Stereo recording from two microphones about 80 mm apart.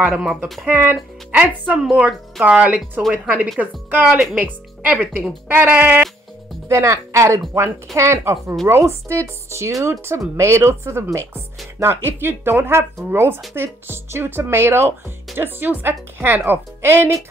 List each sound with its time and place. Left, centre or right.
0.0 s a woman's voice: centre
1.4 s a woman's voice: centre
6.7 s speech: right